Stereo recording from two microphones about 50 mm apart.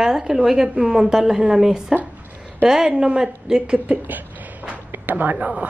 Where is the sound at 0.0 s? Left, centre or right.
Centre; by 4.2 s right.